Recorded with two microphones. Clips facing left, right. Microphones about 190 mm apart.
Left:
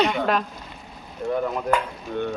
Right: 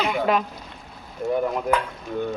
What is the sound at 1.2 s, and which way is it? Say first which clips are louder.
Speech: right 1 dB; 20° right (ahead or behind).